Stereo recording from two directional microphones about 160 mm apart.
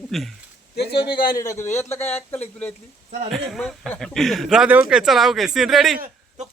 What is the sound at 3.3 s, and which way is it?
Speech, centre (ahead or behind).